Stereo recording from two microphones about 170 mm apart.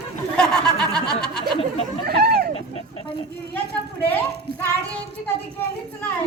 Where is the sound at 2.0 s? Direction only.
70° right (ahead or behind).